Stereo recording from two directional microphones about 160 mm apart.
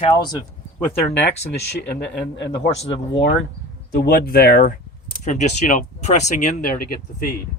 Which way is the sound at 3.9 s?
80° left.